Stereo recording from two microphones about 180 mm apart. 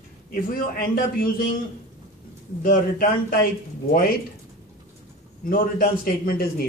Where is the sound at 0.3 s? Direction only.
55° left (ahead or behind).